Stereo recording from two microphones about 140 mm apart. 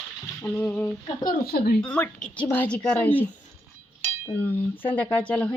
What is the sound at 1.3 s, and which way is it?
Speech, 90° left.